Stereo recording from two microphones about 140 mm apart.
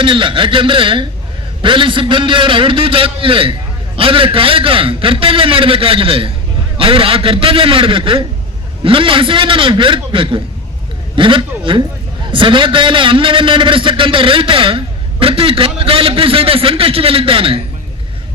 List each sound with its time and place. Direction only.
0.0 s a man's voice: 35° right (ahead or behind)